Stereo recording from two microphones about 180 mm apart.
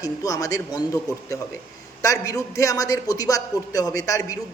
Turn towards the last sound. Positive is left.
turn(degrees=20)  # may be behind; listen again after turning